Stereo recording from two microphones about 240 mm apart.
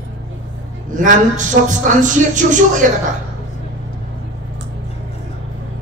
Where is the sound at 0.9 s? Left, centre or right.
Right.